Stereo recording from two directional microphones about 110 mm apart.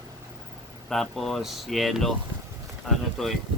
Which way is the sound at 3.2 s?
Centre (ahead or behind).